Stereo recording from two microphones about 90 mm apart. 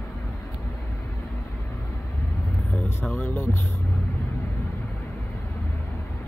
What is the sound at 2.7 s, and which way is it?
Speech, 20° left (ahead or behind).